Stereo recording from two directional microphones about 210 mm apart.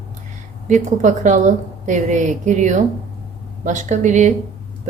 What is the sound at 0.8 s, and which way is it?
A woman's voice, 35° right (ahead or behind).